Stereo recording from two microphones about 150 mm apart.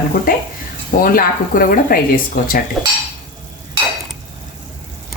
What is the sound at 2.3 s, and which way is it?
Speech, 60° left (ahead or behind).